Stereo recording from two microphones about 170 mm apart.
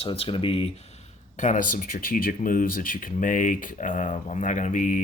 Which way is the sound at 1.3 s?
45° left (ahead or behind).